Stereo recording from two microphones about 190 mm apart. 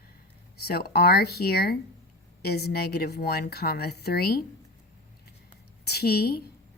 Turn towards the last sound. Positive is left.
turn(degrees=55)  # may be behind; listen again after turning